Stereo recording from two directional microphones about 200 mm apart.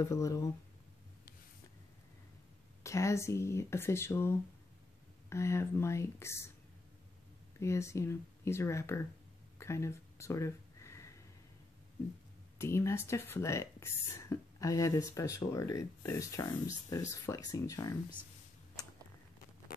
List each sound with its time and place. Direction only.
0.0 s speech: 15° left (ahead or behind)
2.8 s speech: 15° left (ahead or behind)
7.6 s speech: 15° left (ahead or behind)
9.6 s a sound: 15° left (ahead or behind)
12.5 s speech: 15° left (ahead or behind)